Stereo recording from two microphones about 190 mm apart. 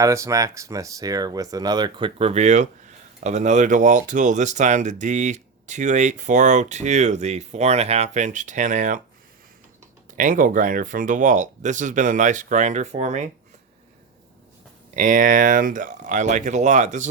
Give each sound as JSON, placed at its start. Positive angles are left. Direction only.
{"t": 0.0, "sound": "speech", "side_deg": -15}
{"t": 10.2, "sound": "speech", "side_deg": -45}
{"t": 14.9, "sound": "speech", "side_deg": -45}